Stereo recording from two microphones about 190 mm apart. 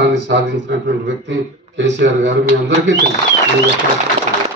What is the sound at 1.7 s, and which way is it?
Speech, 70° right (ahead or behind).